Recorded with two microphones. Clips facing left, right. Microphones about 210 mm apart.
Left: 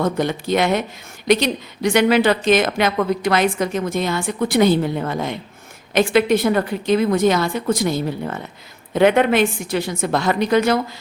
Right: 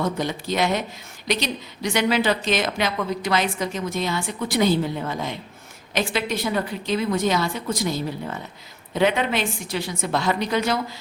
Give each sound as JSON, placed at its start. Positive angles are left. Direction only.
{"t": 0.0, "sound": "a woman's voice", "side_deg": 55}